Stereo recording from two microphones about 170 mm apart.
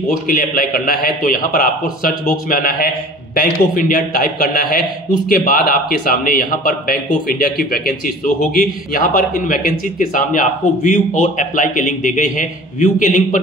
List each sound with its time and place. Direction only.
0.3 s a man's voice: 60° left (ahead or behind)